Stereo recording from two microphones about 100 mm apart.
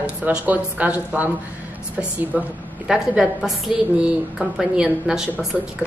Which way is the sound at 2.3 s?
15° right (ahead or behind).